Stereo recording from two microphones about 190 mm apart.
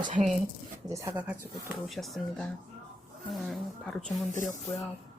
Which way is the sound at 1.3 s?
Centre (ahead or behind).